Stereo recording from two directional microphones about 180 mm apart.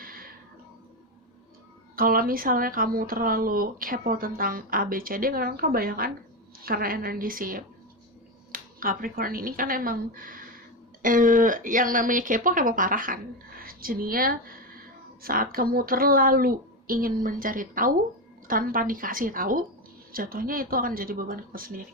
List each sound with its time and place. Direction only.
0.0 s music: 55° right (ahead or behind)
2.0 s speech: 55° right (ahead or behind)